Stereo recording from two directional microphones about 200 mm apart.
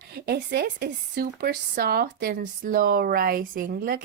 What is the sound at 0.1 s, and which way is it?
Speech, 55° right (ahead or behind).